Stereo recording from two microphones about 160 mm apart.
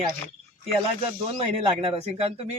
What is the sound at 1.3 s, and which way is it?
A man's voice, 35° right (ahead or behind).